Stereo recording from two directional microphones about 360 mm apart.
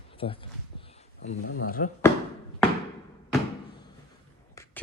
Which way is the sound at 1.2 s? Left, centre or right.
Left.